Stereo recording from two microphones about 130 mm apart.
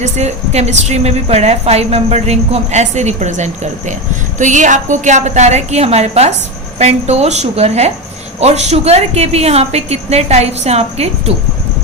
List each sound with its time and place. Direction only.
0.0 s a woman's voice: 60° right (ahead or behind)